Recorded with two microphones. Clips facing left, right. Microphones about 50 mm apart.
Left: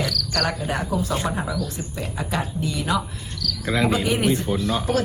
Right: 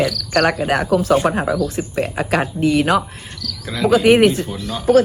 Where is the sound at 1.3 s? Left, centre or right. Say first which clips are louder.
Right 8 dB; right.